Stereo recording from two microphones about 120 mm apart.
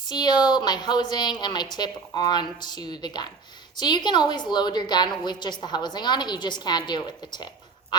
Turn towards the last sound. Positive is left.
turn(degrees=35)  # may be behind; listen again after turning